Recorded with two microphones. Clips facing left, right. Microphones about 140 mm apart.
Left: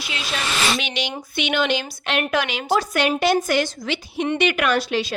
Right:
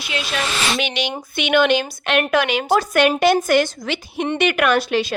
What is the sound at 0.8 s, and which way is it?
A woman's voice, 60° right (ahead or behind).